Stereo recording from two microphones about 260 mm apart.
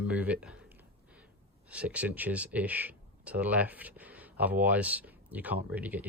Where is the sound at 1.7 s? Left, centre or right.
Centre.